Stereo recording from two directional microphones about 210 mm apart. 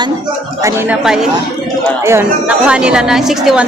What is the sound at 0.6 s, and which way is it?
Speech, 10° right (ahead or behind).